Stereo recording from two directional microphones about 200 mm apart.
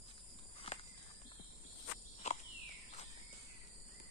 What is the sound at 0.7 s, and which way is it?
Walk, 30° left (ahead or behind).